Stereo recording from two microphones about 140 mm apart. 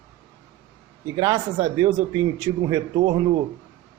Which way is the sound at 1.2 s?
30° right (ahead or behind).